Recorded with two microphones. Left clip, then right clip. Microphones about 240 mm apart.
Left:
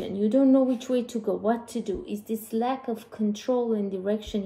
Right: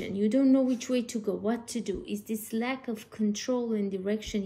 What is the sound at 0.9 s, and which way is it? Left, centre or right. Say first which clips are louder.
Speech: left 3 dB; centre.